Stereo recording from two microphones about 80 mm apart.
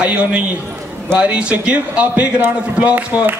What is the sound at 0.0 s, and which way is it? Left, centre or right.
A man's voice, centre.